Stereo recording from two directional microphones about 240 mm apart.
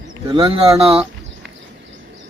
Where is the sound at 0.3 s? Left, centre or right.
Right.